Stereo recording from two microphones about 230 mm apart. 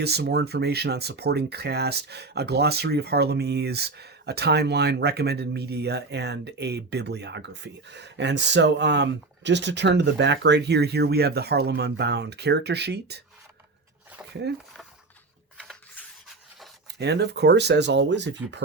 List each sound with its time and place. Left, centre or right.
0.0 s speech: right
15.5 s rub: centre
17.0 s speech: right